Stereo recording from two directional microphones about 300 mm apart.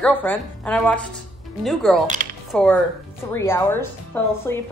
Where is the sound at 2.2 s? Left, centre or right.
Right.